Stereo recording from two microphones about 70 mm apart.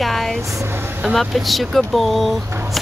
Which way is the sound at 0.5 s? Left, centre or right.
Right.